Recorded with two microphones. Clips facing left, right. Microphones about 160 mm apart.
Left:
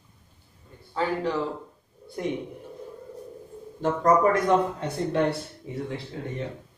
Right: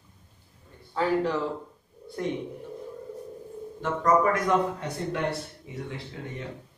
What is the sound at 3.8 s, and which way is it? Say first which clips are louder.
Speech: left 3 dB; 35° left (ahead or behind).